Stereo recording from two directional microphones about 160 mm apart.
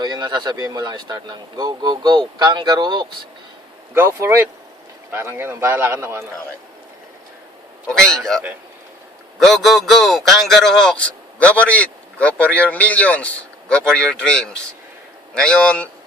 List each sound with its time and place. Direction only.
0.0 s speech: 30° right (ahead or behind)
3.9 s a man's voice: 15° right (ahead or behind)
7.9 s a man's voice: 5° left (ahead or behind)